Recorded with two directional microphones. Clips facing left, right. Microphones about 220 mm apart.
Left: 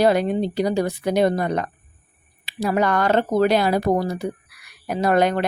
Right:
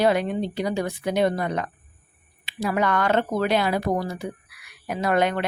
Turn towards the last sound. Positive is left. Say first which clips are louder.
# left 4 dB
turn(degrees=40)  # may be behind; listen again after turning